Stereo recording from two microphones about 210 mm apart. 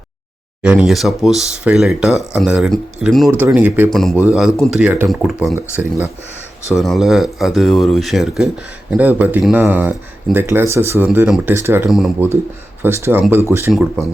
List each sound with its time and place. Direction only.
0.6 s speech: 5° right (ahead or behind)
3.2 s speech: 10° right (ahead or behind)
5.5 s speech: 15° right (ahead or behind)
6.7 s speech: centre (ahead or behind)
11.9 s speech: centre (ahead or behind)
13.7 s speech: centre (ahead or behind)